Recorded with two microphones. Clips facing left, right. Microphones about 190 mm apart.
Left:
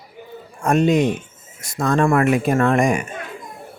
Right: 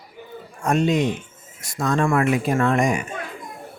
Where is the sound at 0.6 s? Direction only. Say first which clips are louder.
Left 3 dB; 50° left (ahead or behind).